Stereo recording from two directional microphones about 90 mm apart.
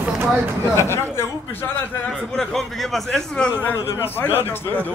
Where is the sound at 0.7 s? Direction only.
30° left (ahead or behind).